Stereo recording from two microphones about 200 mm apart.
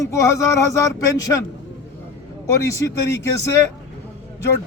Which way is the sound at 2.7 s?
15° left (ahead or behind).